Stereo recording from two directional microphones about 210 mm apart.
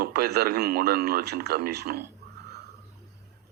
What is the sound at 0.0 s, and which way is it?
Speech, 50° right (ahead or behind).